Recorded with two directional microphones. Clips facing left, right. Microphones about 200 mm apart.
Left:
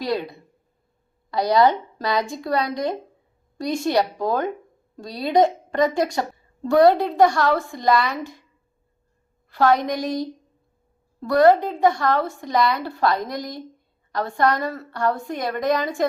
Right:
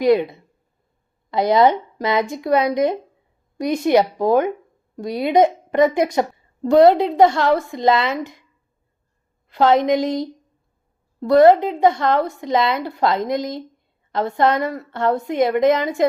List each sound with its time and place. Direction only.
0.0 s a woman's voice: 20° right (ahead or behind)
9.5 s a woman's voice: 20° right (ahead or behind)